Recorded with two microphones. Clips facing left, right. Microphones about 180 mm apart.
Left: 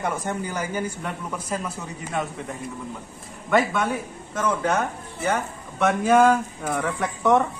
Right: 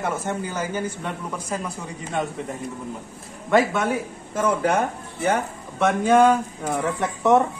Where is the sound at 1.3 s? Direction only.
10° right (ahead or behind).